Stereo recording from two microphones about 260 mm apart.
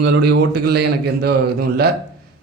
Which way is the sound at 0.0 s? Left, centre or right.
Right.